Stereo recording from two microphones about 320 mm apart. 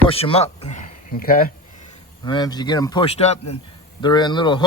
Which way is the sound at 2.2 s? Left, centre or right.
Centre.